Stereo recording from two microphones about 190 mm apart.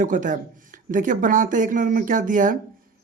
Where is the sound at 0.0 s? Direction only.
45° right (ahead or behind).